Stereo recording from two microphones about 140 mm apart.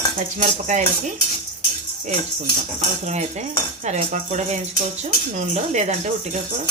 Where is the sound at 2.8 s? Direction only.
55° right (ahead or behind).